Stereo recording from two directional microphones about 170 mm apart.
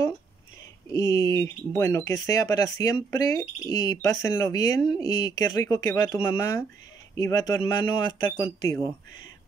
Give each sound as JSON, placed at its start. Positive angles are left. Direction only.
{"t": 0.9, "sound": "speech", "side_deg": 20}